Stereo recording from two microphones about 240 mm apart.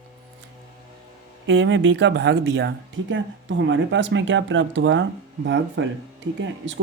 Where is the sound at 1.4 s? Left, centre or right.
Right.